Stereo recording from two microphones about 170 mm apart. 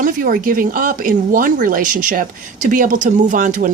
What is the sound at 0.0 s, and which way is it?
Speech, 55° right (ahead or behind).